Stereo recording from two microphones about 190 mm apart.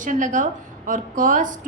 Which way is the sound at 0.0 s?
40° right (ahead or behind).